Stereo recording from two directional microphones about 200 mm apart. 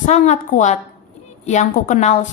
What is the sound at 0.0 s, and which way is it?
A woman's voice, 35° left (ahead or behind).